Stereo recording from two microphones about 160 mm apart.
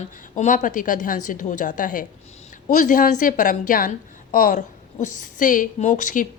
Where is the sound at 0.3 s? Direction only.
55° left (ahead or behind).